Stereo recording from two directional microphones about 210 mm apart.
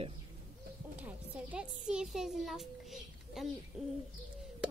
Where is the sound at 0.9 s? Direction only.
5° right (ahead or behind).